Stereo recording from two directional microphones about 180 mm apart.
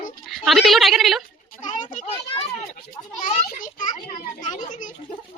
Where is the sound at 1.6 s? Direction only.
45° left (ahead or behind).